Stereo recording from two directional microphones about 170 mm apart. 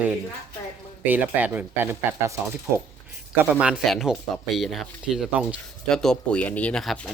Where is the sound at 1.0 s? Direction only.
10° right (ahead or behind).